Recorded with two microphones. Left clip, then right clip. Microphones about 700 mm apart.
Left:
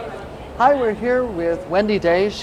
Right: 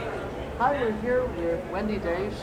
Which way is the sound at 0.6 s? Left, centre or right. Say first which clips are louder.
Left 9 dB; left.